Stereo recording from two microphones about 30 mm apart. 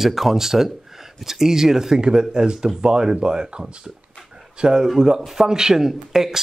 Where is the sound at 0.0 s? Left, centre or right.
Centre.